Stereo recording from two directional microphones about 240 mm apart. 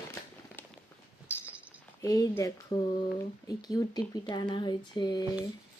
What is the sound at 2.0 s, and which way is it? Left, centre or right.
Speech, centre.